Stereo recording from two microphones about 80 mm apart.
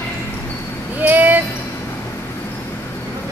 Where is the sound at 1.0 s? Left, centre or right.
Right.